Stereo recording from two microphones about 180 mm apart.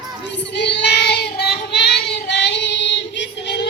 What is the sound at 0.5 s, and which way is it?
Child singing, 70° left (ahead or behind).